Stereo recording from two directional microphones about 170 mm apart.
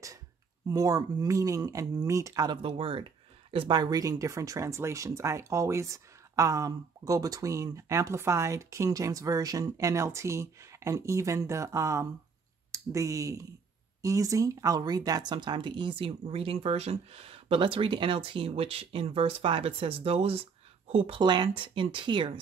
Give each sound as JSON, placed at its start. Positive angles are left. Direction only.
{"t": 0.7, "sound": "speech", "side_deg": -20}